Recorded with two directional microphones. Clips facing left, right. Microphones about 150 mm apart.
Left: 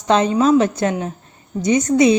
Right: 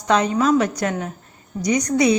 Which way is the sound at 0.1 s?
25° left (ahead or behind).